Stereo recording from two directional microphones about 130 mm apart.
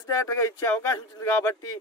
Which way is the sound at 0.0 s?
25° left (ahead or behind).